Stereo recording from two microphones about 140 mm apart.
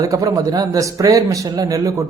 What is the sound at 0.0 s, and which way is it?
Speech, 25° right (ahead or behind).